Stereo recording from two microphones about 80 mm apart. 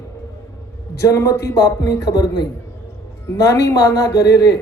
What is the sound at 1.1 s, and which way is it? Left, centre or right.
A man's voice, left.